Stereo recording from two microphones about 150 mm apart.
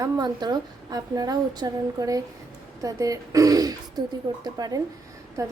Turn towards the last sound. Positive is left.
turn(degrees=-20)  # may be behind; listen again after turning